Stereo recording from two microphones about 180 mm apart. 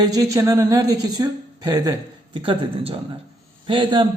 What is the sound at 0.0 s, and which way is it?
Speech, 20° right (ahead or behind).